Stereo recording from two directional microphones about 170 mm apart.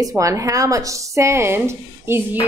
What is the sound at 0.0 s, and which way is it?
Speech, 20° right (ahead or behind).